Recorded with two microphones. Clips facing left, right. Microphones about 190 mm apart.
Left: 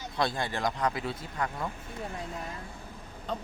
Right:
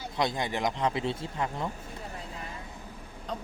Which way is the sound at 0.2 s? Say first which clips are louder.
Right 1 dB; 20° right (ahead or behind).